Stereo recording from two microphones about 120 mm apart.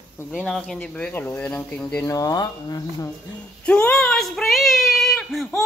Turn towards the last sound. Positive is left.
turn(degrees=0)  # may be behind; listen again after turning